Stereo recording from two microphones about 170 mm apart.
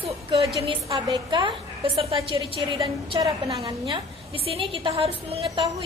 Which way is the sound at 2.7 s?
20° right (ahead or behind).